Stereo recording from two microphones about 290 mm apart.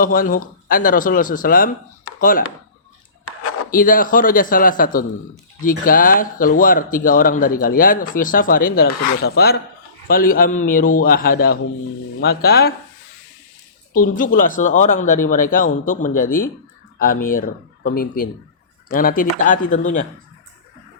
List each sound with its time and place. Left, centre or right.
0.0 s speech: left
3.7 s speech: left
8.9 s speech: left
9.2 s speech: left
13.9 s speech: left